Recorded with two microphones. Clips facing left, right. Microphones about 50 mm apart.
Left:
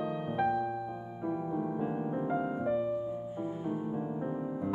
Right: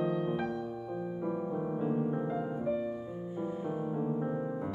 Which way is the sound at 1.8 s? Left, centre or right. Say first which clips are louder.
Right 3 dB; centre.